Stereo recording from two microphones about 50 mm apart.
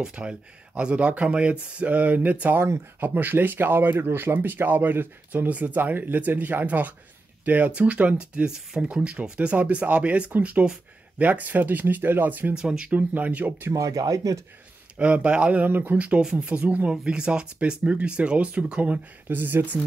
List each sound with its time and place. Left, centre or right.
0.0 s speech: centre
8.5 s speech: centre
8.8 s speech: right
12.5 s speech: centre
12.9 s speech: right
13.7 s speech: right
15.0 s speech: right
16.2 s speech: centre
16.9 s speech: centre
19.2 s speech: right